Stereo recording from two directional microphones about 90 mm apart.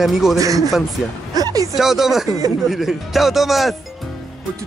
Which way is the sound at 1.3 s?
45° right (ahead or behind).